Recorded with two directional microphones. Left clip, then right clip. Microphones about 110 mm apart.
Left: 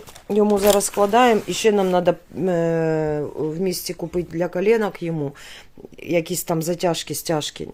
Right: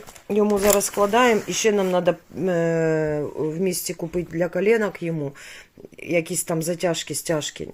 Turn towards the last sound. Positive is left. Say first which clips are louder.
# left 1 dB
turn(degrees=25)  # may be behind; listen again after turning